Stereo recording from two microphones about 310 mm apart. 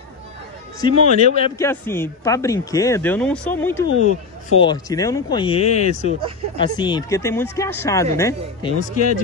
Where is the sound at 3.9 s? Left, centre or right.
Left.